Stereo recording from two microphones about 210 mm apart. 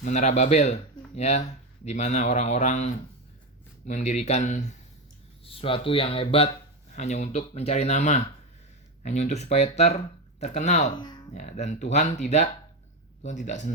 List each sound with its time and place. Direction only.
0.0 s speech: 35° left (ahead or behind)
10.9 s speech: 20° left (ahead or behind)
11.3 s speech: 35° left (ahead or behind)